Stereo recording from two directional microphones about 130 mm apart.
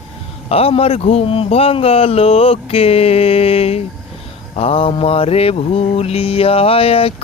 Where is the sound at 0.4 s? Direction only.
50° left (ahead or behind).